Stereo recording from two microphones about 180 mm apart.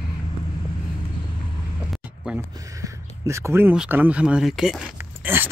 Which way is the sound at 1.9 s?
5° right (ahead or behind).